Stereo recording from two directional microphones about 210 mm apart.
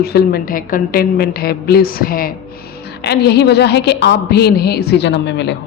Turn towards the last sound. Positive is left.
turn(degrees=55)  # may be behind; listen again after turning